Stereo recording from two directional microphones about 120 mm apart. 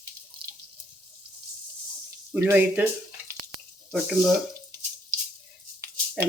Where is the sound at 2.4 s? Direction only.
20° right (ahead or behind).